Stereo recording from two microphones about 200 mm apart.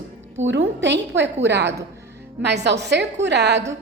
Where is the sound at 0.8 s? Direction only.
60° right (ahead or behind).